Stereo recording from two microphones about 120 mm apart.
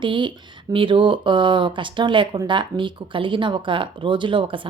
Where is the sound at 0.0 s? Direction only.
40° right (ahead or behind).